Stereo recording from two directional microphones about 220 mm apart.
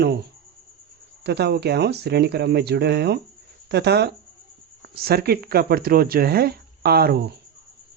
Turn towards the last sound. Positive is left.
turn(degrees=-45)  # may be behind; listen again after turning